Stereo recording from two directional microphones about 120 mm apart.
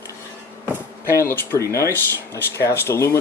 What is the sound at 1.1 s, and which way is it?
Speech, 25° left (ahead or behind).